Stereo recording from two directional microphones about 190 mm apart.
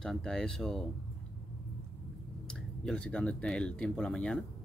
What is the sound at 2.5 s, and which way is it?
Speech, 5° left (ahead or behind).